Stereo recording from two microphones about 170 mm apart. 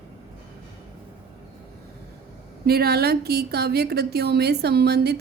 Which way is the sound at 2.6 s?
65° right (ahead or behind).